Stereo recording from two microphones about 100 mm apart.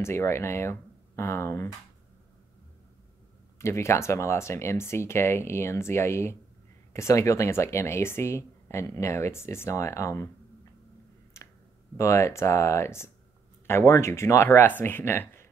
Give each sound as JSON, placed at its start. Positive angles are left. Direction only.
{"t": 0.0, "sound": "speech", "side_deg": 25}
{"t": 3.5, "sound": "speech", "side_deg": 30}
{"t": 12.0, "sound": "speech", "side_deg": 30}